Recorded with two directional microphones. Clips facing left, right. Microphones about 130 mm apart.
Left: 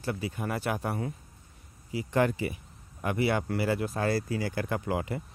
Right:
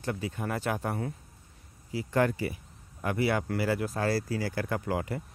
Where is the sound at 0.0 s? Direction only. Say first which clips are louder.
Even; 5° left (ahead or behind).